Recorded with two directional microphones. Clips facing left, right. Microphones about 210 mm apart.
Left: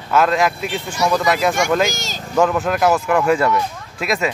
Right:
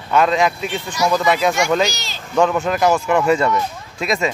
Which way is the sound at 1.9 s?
45° left (ahead or behind).